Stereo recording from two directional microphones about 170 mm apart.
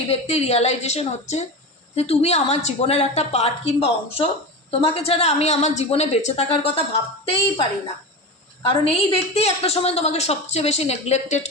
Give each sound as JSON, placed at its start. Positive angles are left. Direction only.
{"t": 0.1, "sound": "a woman's voice", "side_deg": 40}
{"t": 8.6, "sound": "a woman's voice", "side_deg": 35}